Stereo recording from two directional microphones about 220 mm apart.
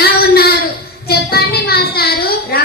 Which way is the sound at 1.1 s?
45° left (ahead or behind).